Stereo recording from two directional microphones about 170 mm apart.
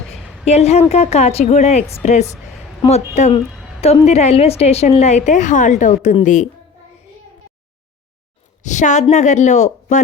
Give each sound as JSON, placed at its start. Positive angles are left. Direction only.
{"t": 0.4, "sound": "a woman's voice", "side_deg": 40}
{"t": 8.6, "sound": "a woman's voice", "side_deg": 45}